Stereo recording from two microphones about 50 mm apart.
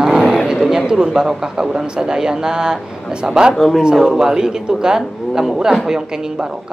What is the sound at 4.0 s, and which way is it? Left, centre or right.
Speech, centre.